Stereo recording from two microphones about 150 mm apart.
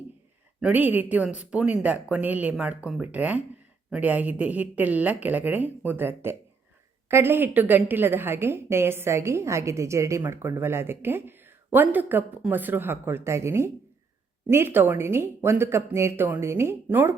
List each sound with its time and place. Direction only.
0.6 s a woman's voice: 10° right (ahead or behind)